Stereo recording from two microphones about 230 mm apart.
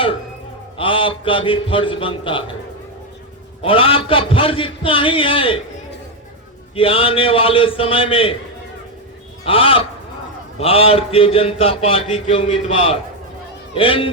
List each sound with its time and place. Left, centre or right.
0.8 s a man's voice: left
3.6 s a man's voice: left
6.7 s a man's voice: left
9.4 s a man's voice: left